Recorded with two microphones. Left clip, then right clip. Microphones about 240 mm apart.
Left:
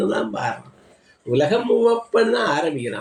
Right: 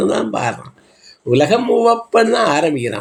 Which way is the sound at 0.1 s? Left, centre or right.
Right.